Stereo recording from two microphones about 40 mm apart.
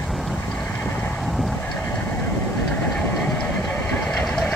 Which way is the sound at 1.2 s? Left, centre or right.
Centre.